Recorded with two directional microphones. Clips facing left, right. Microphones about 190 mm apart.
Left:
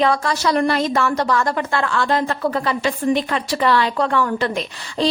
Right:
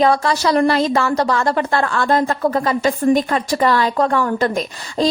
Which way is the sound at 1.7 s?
45° right (ahead or behind).